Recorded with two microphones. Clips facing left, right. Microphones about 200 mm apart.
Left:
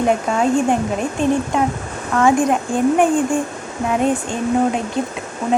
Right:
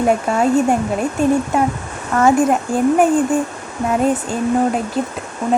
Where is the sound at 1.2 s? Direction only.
45° right (ahead or behind).